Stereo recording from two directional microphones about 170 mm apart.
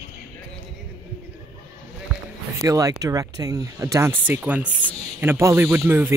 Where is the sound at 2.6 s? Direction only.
20° right (ahead or behind).